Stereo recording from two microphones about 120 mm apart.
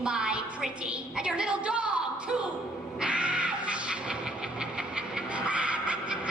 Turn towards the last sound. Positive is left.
turn(degrees=-10)  # may be behind; listen again after turning